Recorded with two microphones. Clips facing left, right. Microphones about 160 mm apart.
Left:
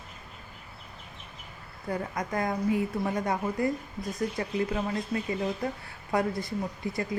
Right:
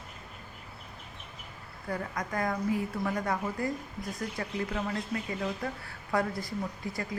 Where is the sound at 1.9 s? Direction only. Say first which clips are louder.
Left 3 dB; 25° left (ahead or behind).